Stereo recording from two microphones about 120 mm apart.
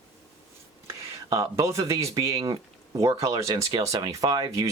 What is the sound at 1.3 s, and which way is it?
Speech, 25° right (ahead or behind).